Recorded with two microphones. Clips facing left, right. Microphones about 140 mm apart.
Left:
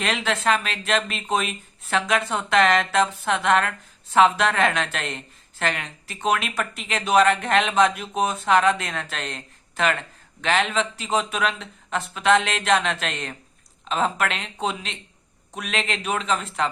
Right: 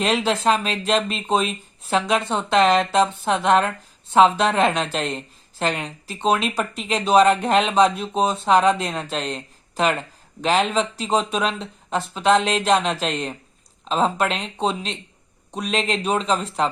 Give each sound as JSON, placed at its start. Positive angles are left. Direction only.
{"t": 0.0, "sound": "speech", "side_deg": -35}
{"t": 14.3, "sound": "speech", "side_deg": 0}
{"t": 14.6, "sound": "speech", "side_deg": -35}